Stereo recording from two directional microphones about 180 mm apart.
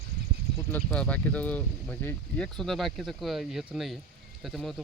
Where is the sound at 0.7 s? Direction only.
10° left (ahead or behind).